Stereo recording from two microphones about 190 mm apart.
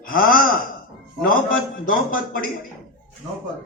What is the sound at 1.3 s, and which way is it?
A man's voice, 45° left (ahead or behind).